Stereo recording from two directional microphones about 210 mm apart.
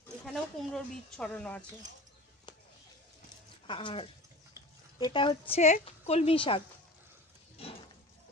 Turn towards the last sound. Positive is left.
turn(degrees=25)  # may be behind; listen again after turning